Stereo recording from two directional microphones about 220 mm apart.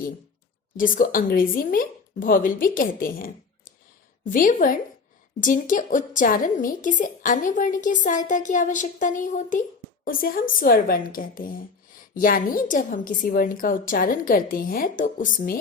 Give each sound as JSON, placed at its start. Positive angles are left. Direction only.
{"t": 0.8, "sound": "a woman's voice", "side_deg": 40}